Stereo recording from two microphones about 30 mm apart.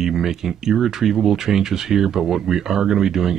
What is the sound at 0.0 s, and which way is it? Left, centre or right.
Speech, centre.